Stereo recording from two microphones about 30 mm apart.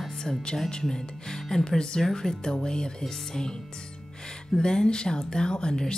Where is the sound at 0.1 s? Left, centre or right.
Left.